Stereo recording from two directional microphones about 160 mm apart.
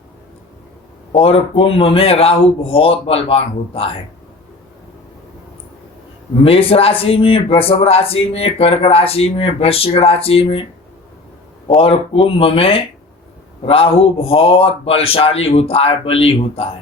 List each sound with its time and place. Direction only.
1.1 s a man's voice: 40° left (ahead or behind)
6.4 s a man's voice: 35° left (ahead or behind)
11.8 s a man's voice: 35° left (ahead or behind)